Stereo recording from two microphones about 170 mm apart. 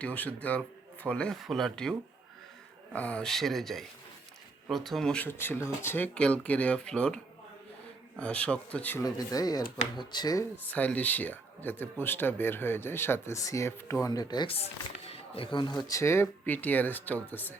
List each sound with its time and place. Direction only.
0.0 s speech: 10° left (ahead or behind)
8.2 s speech: 5° left (ahead or behind)
9.0 s speech: 20° left (ahead or behind)
10.7 s speech: 10° left (ahead or behind); by 14.7 s 35° left (ahead or behind)
15.1 s a sound: 30° left (ahead or behind)
15.8 s speech: 20° left (ahead or behind)